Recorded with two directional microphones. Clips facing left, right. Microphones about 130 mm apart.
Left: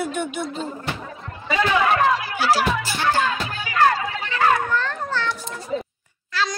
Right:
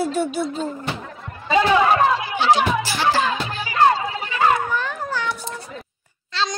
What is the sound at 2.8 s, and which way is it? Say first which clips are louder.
Music: right 2 dB; 90° right.